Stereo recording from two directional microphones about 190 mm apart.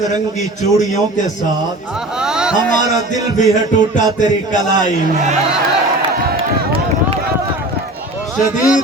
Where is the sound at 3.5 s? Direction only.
40° left (ahead or behind).